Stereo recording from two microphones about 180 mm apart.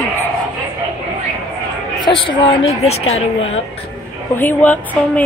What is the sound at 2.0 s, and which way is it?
A woman's voice, 25° left (ahead or behind).